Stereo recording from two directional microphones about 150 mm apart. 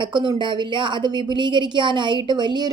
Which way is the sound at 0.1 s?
30° right (ahead or behind).